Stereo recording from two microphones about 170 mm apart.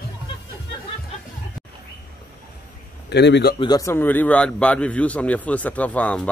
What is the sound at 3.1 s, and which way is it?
Speech, 85° left.